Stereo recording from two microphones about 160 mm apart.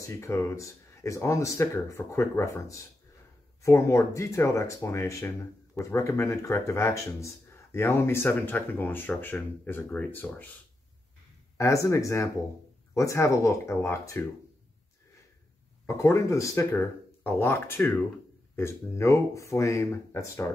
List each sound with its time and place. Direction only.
0.2 s speech: 15° left (ahead or behind)
11.5 s speech: 20° left (ahead or behind)
15.9 s speech: 20° left (ahead or behind)